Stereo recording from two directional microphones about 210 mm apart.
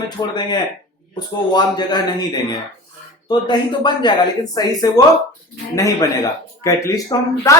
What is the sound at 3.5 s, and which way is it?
A man's voice, 20° left (ahead or behind).